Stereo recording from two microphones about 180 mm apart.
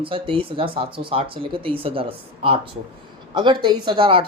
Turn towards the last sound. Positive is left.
turn(degrees=-30)  # may be behind; listen again after turning